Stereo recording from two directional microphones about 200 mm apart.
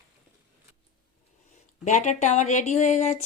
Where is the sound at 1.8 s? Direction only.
35° left (ahead or behind).